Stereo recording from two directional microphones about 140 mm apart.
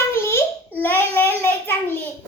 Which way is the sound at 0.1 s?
15° left (ahead or behind).